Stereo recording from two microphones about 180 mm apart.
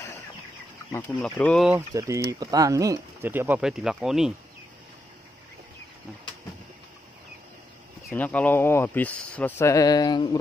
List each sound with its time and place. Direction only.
1.2 s speech: 5° left (ahead or behind)
1.9 s speech: 15° right (ahead or behind)
8.1 s speech: 10° left (ahead or behind); by 10.4 s 25° left (ahead or behind)